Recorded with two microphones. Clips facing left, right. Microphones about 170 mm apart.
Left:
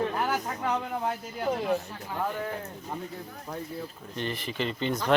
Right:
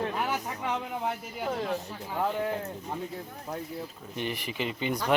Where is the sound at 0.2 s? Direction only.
5° right (ahead or behind).